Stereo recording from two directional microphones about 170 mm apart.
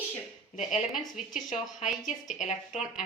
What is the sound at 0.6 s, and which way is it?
Speech, centre (ahead or behind).